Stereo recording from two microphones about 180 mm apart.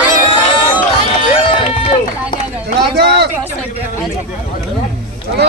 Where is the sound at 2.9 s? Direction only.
65° right (ahead or behind).